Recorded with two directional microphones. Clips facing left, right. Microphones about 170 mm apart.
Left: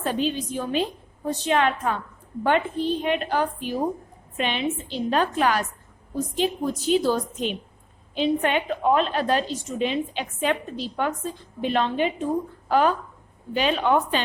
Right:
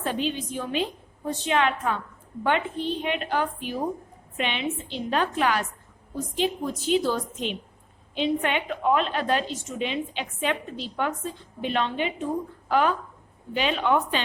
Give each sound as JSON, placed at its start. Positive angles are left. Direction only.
{"t": 0.0, "sound": "a woman's voice", "side_deg": 40}